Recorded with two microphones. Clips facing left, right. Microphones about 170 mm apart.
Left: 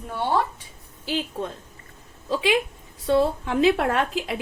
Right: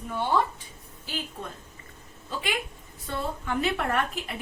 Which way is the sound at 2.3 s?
90° left.